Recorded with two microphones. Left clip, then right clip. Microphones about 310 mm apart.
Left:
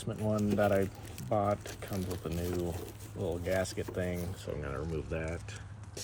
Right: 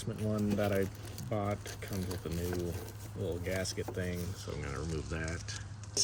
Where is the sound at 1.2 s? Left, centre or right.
Centre.